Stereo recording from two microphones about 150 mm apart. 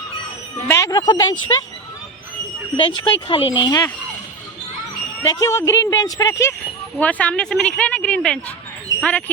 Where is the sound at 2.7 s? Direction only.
30° left (ahead or behind).